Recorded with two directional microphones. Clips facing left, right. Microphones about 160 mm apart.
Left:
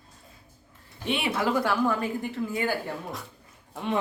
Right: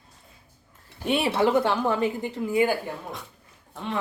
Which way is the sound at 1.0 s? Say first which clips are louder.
Right 5 dB; 40° right (ahead or behind).